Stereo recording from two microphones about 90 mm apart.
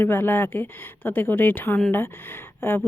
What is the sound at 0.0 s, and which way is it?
Speech, 25° left (ahead or behind).